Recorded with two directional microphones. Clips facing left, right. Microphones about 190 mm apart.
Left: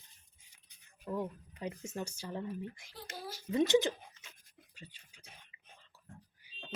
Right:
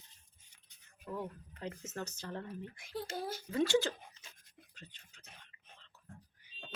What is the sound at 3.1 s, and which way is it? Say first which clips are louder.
Speech: right 4 dB; 30° right (ahead or behind).